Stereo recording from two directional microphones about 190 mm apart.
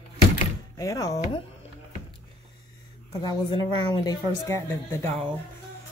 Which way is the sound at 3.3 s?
25° left (ahead or behind).